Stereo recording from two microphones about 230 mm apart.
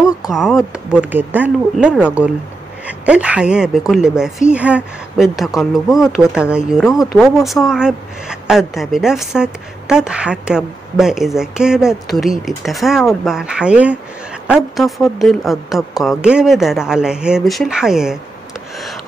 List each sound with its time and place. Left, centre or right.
0.0 s a woman's voice: centre